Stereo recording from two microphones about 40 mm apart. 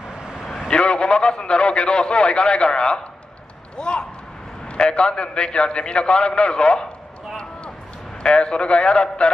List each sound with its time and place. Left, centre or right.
0.2 s vehicle: centre
0.7 s a man's voice: left
3.7 s a sound: left
4.7 s a man's voice: left
8.2 s a man's voice: left